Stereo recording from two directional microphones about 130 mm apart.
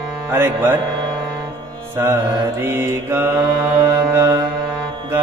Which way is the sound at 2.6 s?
15° right (ahead or behind).